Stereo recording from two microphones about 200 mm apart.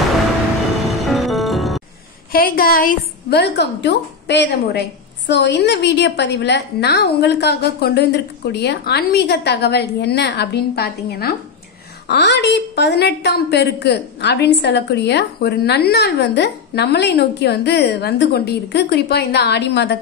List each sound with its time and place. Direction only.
1.0 s music: centre (ahead or behind)
2.3 s a woman's voice: 45° left (ahead or behind)